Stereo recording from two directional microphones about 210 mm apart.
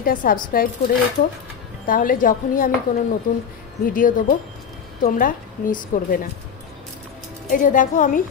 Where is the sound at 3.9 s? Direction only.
40° left (ahead or behind).